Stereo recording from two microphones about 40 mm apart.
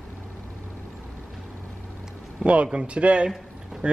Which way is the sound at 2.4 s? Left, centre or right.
Right.